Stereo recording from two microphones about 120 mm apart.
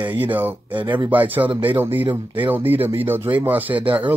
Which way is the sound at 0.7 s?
40° right (ahead or behind).